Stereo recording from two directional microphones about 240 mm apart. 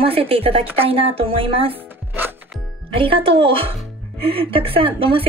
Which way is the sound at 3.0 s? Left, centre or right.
Right.